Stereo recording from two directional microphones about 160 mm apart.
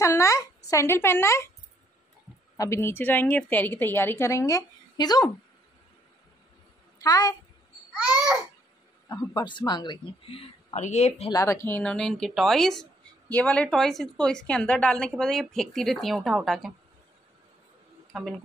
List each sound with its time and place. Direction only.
0.0 s a woman's voice: 20° left (ahead or behind)
2.5 s a woman's voice: 20° left (ahead or behind)
7.0 s speech: 25° left (ahead or behind)
9.1 s speech: 25° left (ahead or behind); by 11.2 s 45° left (ahead or behind)
11.3 s a woman's voice: 20° left (ahead or behind); by 16.7 s centre (ahead or behind)
18.1 s a woman's voice: centre (ahead or behind)